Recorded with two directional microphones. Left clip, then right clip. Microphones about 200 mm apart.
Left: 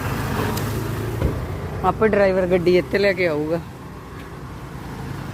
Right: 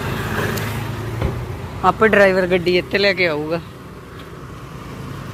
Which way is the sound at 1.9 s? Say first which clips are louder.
Right 4 dB; 5° right (ahead or behind).